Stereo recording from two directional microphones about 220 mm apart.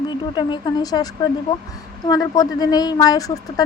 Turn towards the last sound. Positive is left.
turn(degrees=15)  # may be behind; listen again after turning